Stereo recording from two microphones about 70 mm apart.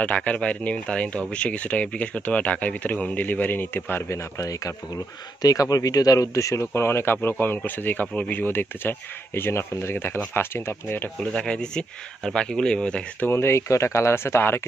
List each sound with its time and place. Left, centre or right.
0.0 s speech: centre
4.1 s speech: left
11.3 s speech: centre
13.2 s speech: left